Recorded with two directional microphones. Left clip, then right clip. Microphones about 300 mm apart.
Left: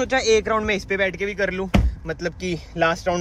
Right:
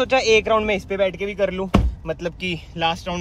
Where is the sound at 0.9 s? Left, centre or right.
Centre.